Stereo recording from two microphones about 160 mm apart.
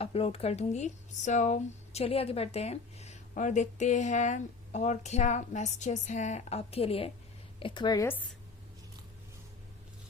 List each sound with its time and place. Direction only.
0.0 s a woman's voice: 35° left (ahead or behind)